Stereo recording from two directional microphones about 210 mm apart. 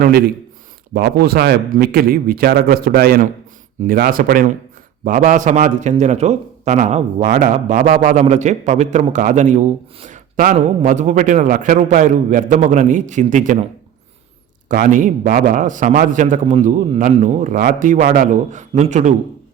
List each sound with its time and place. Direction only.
0.0 s a man's voice: 45° right (ahead or behind)
14.7 s a man's voice: 40° right (ahead or behind)